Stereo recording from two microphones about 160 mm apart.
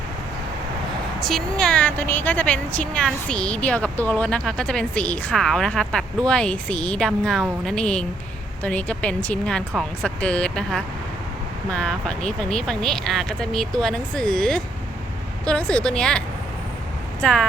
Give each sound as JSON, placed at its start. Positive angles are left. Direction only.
{"t": 1.2, "sound": "a woman's voice", "side_deg": 0}